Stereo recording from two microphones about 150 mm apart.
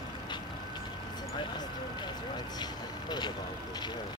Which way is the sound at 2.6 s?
30° left (ahead or behind).